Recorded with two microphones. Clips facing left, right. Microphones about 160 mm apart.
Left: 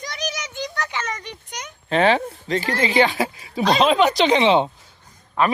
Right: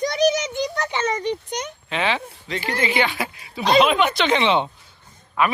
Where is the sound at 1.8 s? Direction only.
40° left (ahead or behind).